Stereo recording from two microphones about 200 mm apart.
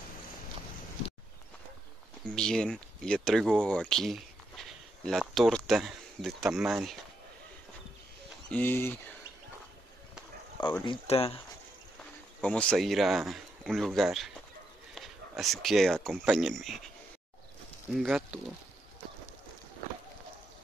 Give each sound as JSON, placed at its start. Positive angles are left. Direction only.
{"t": 2.2, "sound": "speech", "side_deg": 5}
{"t": 8.5, "sound": "speech", "side_deg": 10}
{"t": 10.9, "sound": "speech", "side_deg": 30}
{"t": 12.4, "sound": "speech", "side_deg": 5}
{"t": 17.9, "sound": "speech", "side_deg": 0}